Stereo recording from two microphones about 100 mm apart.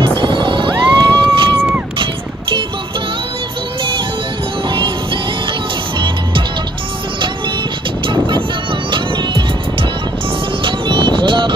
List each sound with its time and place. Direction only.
0.0 s music: 60° right (ahead or behind)
4.6 s music: 55° right (ahead or behind)
8.1 s vehicle: 55° right (ahead or behind)
8.9 s music: 55° right (ahead or behind)